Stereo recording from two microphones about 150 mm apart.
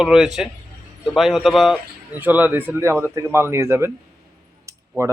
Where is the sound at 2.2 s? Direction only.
10° right (ahead or behind).